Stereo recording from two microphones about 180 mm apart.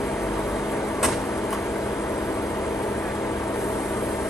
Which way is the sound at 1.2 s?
10° left (ahead or behind).